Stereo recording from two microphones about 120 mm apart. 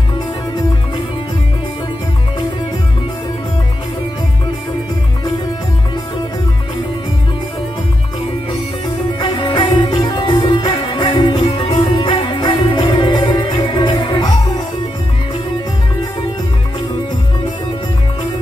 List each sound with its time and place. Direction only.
9.2 s music: 45° left (ahead or behind)